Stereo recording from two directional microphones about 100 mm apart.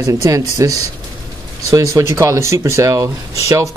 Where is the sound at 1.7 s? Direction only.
30° right (ahead or behind).